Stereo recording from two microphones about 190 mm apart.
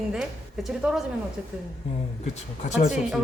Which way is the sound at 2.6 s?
35° left (ahead or behind).